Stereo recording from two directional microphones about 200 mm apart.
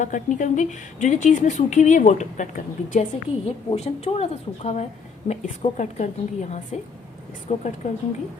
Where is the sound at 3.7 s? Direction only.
30° left (ahead or behind).